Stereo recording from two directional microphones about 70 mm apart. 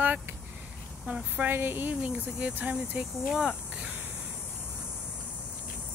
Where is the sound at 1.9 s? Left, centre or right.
Centre.